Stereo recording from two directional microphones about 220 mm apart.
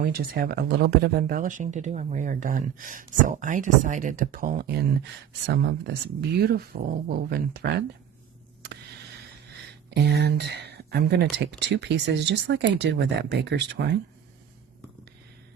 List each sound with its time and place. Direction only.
0.0 s speech: 40° right (ahead or behind)
9.9 s speech: 50° right (ahead or behind)